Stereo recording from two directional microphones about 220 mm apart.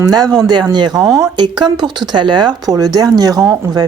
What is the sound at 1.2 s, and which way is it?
Speech, 20° right (ahead or behind).